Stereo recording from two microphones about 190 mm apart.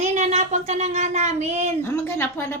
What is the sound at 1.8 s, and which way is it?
Speech, 10° left (ahead or behind).